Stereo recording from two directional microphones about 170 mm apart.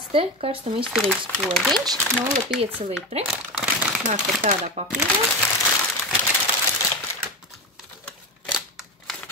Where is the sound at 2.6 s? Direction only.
35° right (ahead or behind).